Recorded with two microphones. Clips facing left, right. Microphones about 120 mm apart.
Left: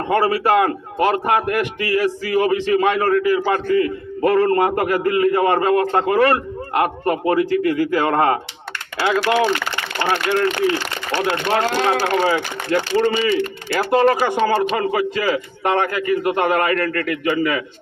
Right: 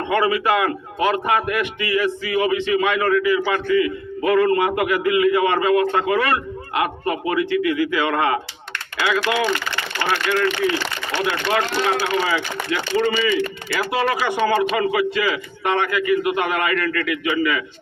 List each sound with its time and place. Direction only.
0.0 s a man's voice: 40° left (ahead or behind)
10.1 s speech: 45° left (ahead or behind)
11.3 s a man's voice: 35° left (ahead or behind)
12.0 s speech: 50° left (ahead or behind)